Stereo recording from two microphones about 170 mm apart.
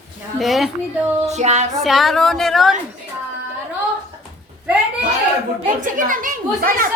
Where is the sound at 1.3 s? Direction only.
40° right (ahead or behind).